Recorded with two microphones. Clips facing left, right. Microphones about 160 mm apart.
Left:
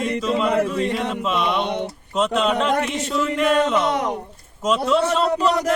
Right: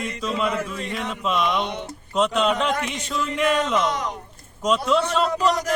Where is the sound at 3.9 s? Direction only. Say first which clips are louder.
Left 5 dB; 60° left (ahead or behind).